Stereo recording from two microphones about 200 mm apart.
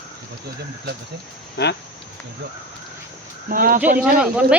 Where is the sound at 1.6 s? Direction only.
55° left (ahead or behind).